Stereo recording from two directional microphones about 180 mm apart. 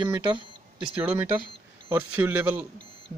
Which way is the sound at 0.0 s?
25° right (ahead or behind).